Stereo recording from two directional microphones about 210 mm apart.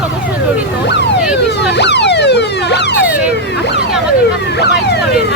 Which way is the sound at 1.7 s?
55° left (ahead or behind).